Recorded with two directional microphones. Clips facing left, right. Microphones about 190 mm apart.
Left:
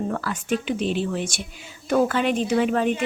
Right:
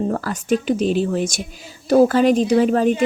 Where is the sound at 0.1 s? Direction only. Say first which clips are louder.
Right 5 dB; 40° right (ahead or behind).